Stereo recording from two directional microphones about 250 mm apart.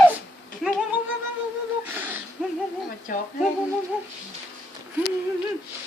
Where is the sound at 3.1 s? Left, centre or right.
Left.